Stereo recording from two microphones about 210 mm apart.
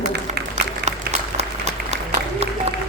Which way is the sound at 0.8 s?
30° right (ahead or behind).